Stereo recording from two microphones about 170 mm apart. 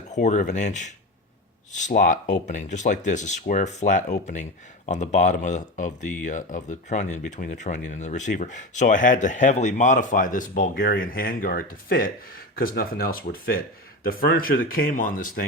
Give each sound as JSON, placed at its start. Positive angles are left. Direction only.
{"t": 0.1, "sound": "speech", "side_deg": 45}